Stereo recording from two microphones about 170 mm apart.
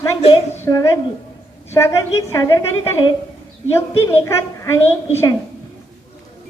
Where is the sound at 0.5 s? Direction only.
15° left (ahead or behind).